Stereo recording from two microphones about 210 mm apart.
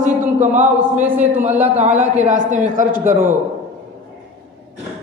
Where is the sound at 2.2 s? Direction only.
35° right (ahead or behind).